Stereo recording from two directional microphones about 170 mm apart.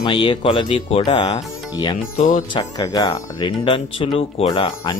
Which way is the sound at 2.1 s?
50° left (ahead or behind).